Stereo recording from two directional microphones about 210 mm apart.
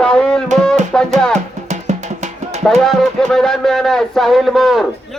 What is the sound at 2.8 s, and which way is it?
Speech, centre (ahead or behind).